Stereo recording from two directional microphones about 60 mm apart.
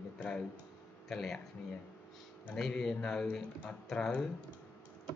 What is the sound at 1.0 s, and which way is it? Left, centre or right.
Speech, centre.